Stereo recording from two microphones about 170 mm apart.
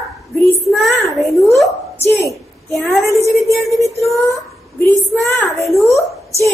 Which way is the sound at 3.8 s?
20° left (ahead or behind).